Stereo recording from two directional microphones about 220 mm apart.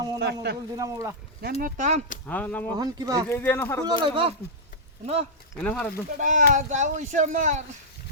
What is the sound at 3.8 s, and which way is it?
Speech, 20° right (ahead or behind).